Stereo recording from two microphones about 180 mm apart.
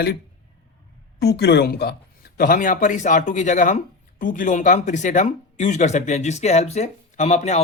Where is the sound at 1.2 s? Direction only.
65° left (ahead or behind).